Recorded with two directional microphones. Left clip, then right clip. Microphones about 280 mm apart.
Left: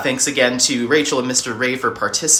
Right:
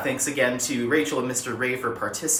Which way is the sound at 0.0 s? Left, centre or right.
Centre.